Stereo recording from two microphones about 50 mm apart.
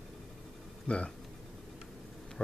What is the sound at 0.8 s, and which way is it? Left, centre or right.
Speech, left.